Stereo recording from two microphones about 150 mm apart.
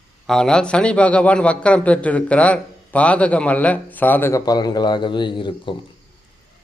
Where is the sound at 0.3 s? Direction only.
5° left (ahead or behind); by 5.7 s 35° left (ahead or behind).